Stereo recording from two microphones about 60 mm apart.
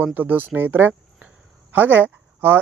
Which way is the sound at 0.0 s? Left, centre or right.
Right.